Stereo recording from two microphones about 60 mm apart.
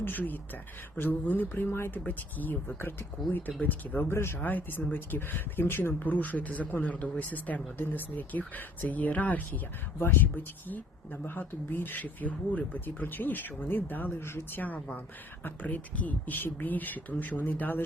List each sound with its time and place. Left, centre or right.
0.0 s speech: left
4.1 s speech: left
4.4 s speech: left
10.0 s speech: left
14.3 s speech: left
14.6 s speech: left